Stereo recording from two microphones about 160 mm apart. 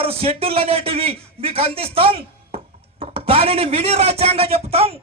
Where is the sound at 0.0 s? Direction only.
35° right (ahead or behind).